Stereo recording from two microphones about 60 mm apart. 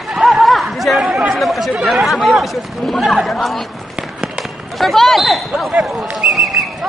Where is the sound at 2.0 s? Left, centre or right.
Centre.